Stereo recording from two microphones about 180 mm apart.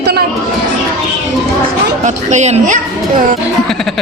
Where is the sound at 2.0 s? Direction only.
40° right (ahead or behind).